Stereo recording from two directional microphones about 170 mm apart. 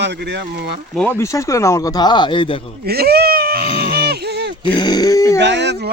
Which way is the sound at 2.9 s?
70° right (ahead or behind).